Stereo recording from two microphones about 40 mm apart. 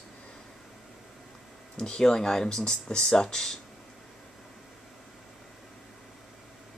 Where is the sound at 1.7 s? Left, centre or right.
Left.